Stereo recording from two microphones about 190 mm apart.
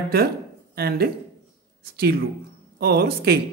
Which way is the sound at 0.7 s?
55° right (ahead or behind).